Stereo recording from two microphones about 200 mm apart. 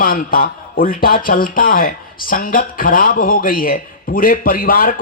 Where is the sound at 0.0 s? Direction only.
45° left (ahead or behind).